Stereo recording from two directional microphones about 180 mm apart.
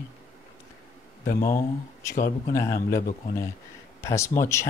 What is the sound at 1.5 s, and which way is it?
Speech, 15° left (ahead or behind).